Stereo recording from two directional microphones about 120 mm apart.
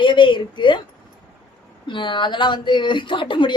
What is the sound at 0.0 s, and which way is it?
Speech, 40° left (ahead or behind).